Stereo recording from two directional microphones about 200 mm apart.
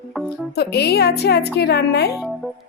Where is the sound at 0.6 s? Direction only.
55° left (ahead or behind).